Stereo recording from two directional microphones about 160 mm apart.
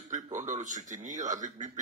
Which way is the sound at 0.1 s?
50° right (ahead or behind).